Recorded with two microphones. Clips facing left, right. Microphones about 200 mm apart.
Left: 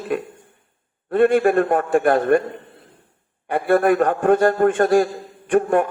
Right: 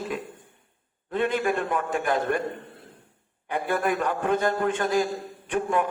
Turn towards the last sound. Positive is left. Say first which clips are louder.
# left 8 dB
turn(degrees=55)  # may be behind; listen again after turning